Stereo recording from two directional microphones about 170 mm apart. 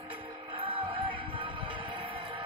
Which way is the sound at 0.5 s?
30° right (ahead or behind).